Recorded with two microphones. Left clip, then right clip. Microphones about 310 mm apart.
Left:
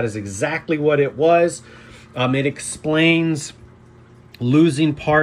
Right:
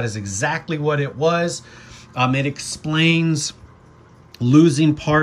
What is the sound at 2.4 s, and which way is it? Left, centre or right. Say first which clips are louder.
Speech: left 3 dB; centre.